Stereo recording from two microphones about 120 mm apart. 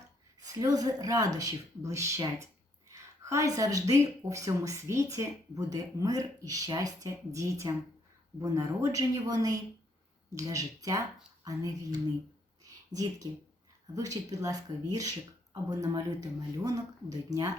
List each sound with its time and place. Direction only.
0.6 s speech: 30° right (ahead or behind)
12.6 s a sound: 30° right (ahead or behind)
13.9 s speech: 30° right (ahead or behind)